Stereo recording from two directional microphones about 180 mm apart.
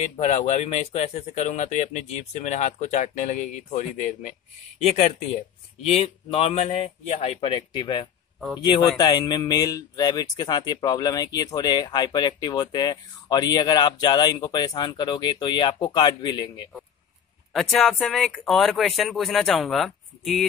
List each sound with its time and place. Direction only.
0.0 s speech: 40° left (ahead or behind); by 16.6 s 25° left (ahead or behind)
17.5 s speech: centre (ahead or behind)